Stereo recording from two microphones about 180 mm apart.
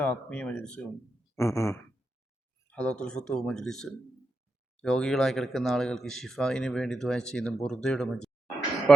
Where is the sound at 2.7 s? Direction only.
5° left (ahead or behind).